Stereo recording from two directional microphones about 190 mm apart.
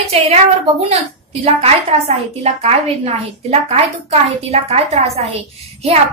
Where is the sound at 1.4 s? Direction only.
30° right (ahead or behind).